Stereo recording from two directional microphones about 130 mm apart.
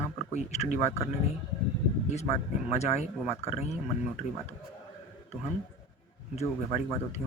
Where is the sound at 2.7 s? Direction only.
55° left (ahead or behind).